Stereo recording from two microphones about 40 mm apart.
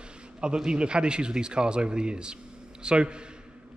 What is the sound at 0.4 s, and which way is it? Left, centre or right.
A man's voice, right.